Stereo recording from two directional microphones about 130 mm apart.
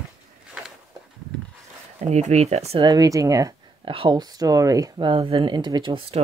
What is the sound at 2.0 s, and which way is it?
Speech, 55° right (ahead or behind).